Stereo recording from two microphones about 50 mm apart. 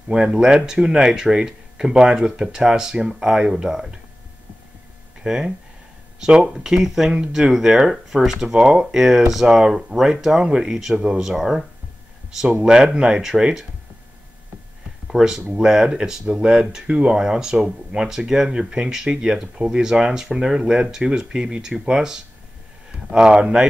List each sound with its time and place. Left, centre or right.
0.1 s speech: centre
5.2 s speech: centre
11.0 s speech: centre
11.2 s speech: centre
12.6 s speech: centre
15.0 s speech: centre